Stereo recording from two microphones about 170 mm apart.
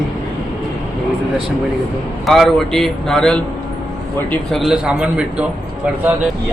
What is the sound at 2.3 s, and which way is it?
A man's voice, centre (ahead or behind).